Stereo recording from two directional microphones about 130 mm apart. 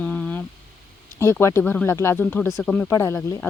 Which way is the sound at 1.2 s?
20° left (ahead or behind).